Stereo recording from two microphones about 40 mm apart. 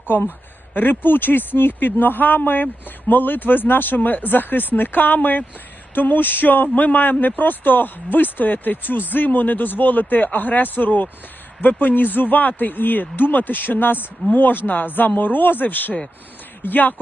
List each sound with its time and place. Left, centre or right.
0.7 s speech: left